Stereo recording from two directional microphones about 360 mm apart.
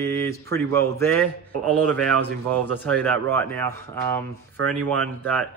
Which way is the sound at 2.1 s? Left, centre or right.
Right.